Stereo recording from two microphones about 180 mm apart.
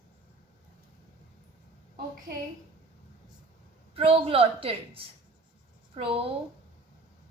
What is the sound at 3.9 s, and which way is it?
A woman's voice, 30° right (ahead or behind).